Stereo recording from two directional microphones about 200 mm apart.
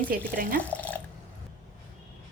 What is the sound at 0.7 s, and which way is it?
Water, 10° left (ahead or behind).